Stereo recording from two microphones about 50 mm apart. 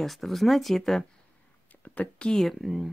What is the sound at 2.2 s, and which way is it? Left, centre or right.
Speech, centre.